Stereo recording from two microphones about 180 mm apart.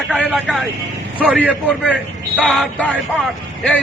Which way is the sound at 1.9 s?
5° right (ahead or behind).